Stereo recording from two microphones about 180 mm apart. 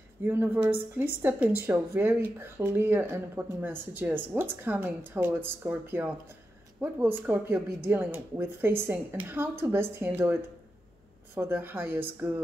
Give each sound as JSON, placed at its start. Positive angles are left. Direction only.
{"t": 0.2, "sound": "speech", "side_deg": -10}